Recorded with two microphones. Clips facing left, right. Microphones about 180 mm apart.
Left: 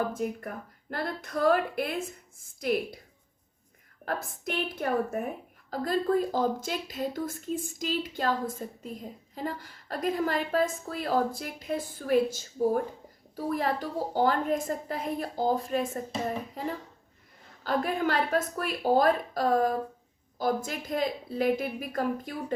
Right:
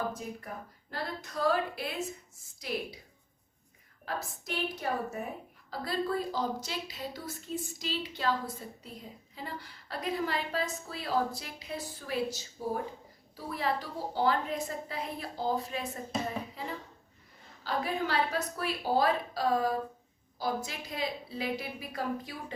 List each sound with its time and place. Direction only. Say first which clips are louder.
0.1 s speech: left 7 dB; 55° left (ahead or behind)
4.0 s speech: left 5 dB; 55° left (ahead or behind)